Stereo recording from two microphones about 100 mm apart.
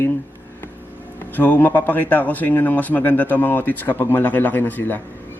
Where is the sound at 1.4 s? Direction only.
20° left (ahead or behind).